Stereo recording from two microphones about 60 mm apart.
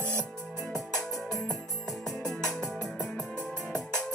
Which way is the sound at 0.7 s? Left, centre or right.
Centre.